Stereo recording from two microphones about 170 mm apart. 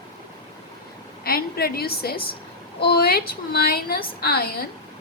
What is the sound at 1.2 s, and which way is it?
A woman's voice, 65° left (ahead or behind).